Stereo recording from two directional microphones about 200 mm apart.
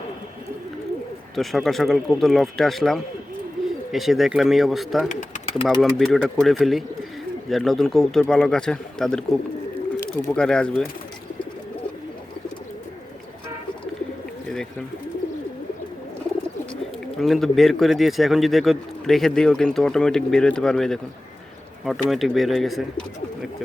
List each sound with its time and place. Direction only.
1.4 s speech: centre (ahead or behind)
5.0 s speech: 35° left (ahead or behind)
5.8 s speech: centre (ahead or behind)
17.2 s speech: centre (ahead or behind)